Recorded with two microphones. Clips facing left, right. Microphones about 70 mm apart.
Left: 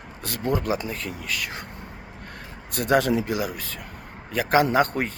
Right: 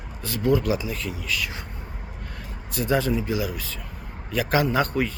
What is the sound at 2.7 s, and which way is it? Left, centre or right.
Speech, left.